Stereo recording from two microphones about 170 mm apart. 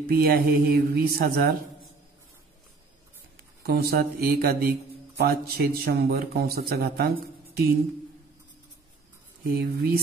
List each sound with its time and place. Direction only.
0.0 s a man's voice: 60° right (ahead or behind)
3.6 s a man's voice: 65° right (ahead or behind)
9.5 s a man's voice: 60° right (ahead or behind)